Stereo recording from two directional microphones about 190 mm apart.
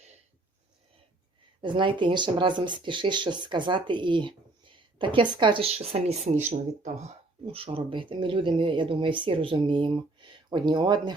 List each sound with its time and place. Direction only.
1.6 s speech: 25° right (ahead or behind)